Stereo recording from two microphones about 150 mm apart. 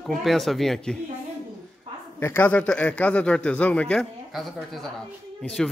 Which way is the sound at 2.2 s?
15° left (ahead or behind).